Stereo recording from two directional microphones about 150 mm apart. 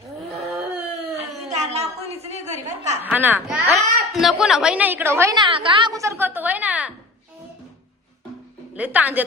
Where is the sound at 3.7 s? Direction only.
Centre (ahead or behind); by 5.3 s 20° right (ahead or behind).